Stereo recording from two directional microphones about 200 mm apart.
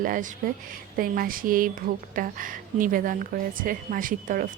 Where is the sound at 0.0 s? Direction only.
45° right (ahead or behind).